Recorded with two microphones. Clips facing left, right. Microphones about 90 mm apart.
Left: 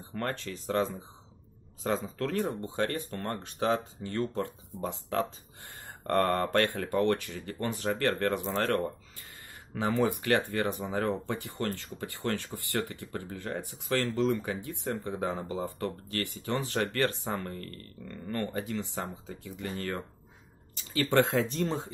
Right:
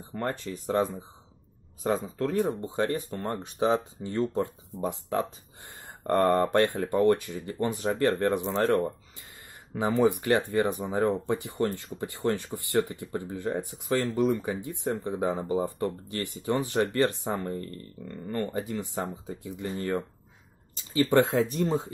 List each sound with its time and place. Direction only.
0.1 s speech: 15° right (ahead or behind)
2.1 s speech: 15° right (ahead or behind)
21.4 s speech: 10° right (ahead or behind)